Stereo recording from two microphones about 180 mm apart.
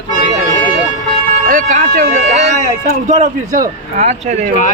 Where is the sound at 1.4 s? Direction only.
45° right (ahead or behind).